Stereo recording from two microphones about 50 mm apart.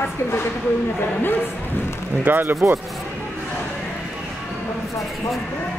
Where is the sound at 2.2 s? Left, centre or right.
Right.